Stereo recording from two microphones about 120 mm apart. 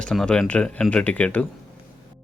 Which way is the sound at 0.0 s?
5° left (ahead or behind).